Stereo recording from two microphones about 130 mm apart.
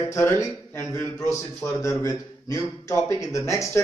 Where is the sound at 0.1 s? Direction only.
20° left (ahead or behind).